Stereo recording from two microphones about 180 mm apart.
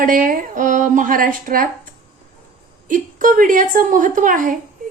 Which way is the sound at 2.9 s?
50° right (ahead or behind).